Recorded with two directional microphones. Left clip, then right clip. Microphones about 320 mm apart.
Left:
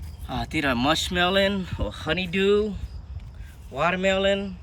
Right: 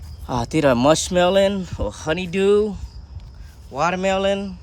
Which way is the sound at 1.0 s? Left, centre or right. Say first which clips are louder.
Right 5 dB; centre.